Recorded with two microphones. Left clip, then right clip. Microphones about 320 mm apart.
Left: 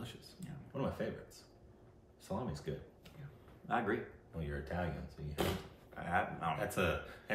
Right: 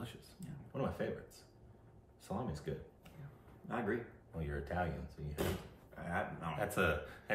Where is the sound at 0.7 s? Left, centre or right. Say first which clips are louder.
Even; centre.